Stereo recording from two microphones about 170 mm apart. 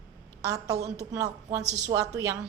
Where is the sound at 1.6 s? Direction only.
40° right (ahead or behind).